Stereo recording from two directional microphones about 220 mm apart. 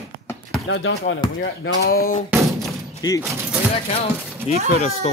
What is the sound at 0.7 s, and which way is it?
Speech, 55° left (ahead or behind).